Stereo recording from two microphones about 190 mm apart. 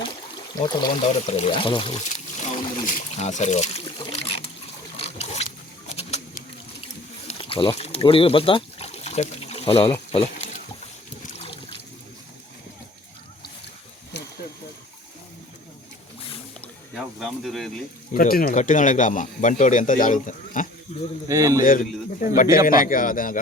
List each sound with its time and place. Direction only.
0.5 s speech: 20° left (ahead or behind)
2.4 s a sound: 40° left (ahead or behind)
6.0 s rodents: 35° left (ahead or behind)
7.3 s a sound: 30° left (ahead or behind)
11.3 s trickle: 30° left (ahead or behind)
16.6 s a sound: centre (ahead or behind)
18.1 s speech: 45° left (ahead or behind)
21.2 s a man's voice: 15° right (ahead or behind)
21.6 s speech: 45° left (ahead or behind)